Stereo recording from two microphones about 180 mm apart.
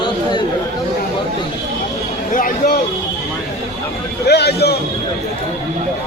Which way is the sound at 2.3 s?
50° left (ahead or behind).